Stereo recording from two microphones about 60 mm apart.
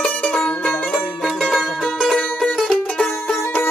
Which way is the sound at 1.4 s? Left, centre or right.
Centre.